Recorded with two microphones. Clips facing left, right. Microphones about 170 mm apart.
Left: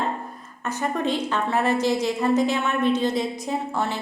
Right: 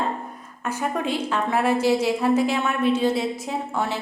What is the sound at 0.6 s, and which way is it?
A woman's voice, 5° right (ahead or behind).